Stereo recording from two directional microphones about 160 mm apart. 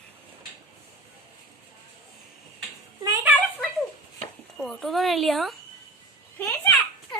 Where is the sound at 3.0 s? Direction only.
15° right (ahead or behind).